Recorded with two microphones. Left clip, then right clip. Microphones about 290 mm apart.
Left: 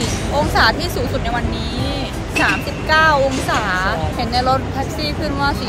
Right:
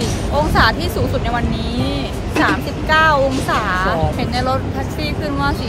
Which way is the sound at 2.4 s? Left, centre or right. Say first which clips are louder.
Even; centre.